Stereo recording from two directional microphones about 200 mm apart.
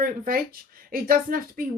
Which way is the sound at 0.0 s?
45° right (ahead or behind).